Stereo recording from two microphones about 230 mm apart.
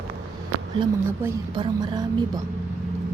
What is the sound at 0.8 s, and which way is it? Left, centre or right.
Speech, centre.